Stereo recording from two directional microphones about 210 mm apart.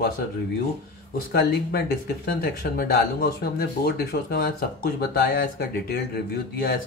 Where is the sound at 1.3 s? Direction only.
50° left (ahead or behind).